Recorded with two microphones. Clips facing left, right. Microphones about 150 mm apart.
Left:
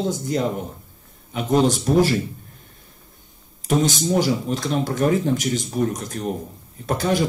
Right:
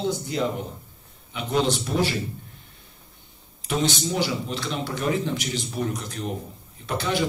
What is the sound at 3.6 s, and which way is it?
A man's voice, 45° left (ahead or behind).